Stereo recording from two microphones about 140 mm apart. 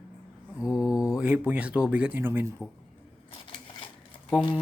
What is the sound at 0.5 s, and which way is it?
Speech, 5° right (ahead or behind).